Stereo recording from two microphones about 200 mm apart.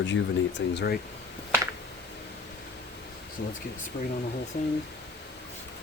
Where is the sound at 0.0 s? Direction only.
65° left (ahead or behind).